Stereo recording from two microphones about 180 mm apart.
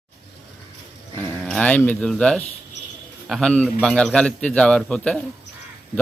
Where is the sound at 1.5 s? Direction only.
5° left (ahead or behind).